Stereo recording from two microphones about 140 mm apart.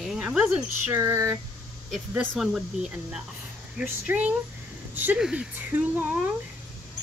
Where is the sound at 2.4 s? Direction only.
5° right (ahead or behind).